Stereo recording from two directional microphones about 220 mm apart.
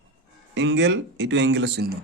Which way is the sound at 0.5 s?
55° right (ahead or behind).